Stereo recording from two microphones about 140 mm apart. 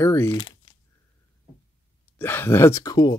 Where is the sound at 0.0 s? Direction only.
20° left (ahead or behind).